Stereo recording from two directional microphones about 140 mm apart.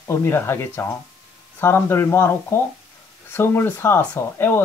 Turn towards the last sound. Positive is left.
turn(degrees=15)  # may be behind; listen again after turning